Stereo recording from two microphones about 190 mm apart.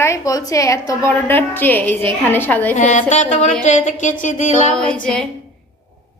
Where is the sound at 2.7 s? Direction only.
40° left (ahead or behind).